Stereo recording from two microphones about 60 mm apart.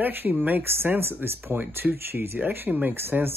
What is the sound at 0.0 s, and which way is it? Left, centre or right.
Speech, right.